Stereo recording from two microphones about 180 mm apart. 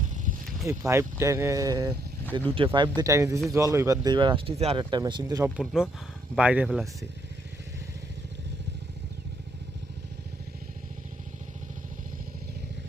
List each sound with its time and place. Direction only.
0.7 s speech: 15° right (ahead or behind)
5.4 s speech: 5° right (ahead or behind)